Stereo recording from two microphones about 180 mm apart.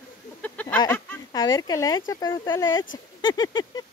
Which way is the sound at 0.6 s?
15° left (ahead or behind).